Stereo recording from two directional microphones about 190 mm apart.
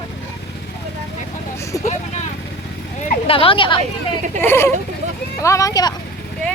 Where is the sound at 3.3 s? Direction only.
30° left (ahead or behind).